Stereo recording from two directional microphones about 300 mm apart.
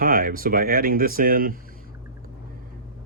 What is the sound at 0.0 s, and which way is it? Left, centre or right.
Speech, right.